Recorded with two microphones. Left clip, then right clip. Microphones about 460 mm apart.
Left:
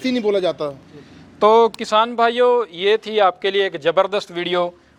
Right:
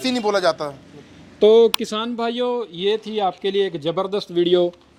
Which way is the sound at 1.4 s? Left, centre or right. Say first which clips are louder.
Even; left.